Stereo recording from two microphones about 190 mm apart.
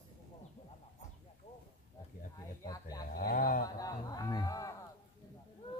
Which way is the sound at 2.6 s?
20° left (ahead or behind).